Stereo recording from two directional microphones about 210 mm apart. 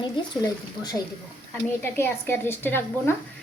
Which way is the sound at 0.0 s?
20° left (ahead or behind).